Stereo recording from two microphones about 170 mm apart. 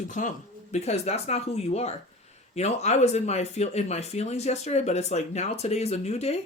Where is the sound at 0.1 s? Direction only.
45° left (ahead or behind).